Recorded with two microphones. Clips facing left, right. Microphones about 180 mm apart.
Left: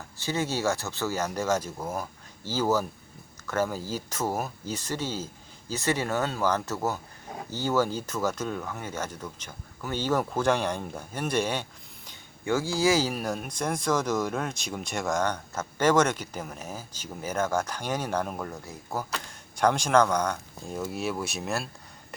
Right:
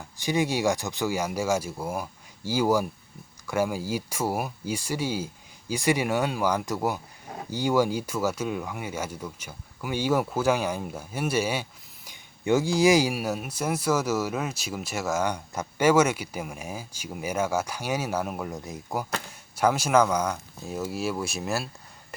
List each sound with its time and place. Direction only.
0.2 s speech: 15° right (ahead or behind)
18.5 s speech: 20° right (ahead or behind)
19.3 s speech: 5° right (ahead or behind)